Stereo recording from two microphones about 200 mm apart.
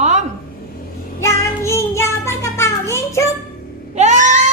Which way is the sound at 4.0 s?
35° right (ahead or behind).